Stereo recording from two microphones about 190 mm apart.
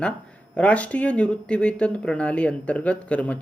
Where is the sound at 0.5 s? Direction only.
5° left (ahead or behind).